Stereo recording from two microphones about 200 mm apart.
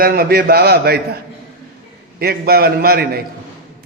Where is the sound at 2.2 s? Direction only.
50° right (ahead or behind).